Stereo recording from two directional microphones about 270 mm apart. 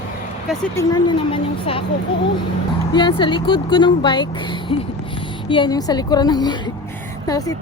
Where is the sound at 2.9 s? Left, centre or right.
Centre.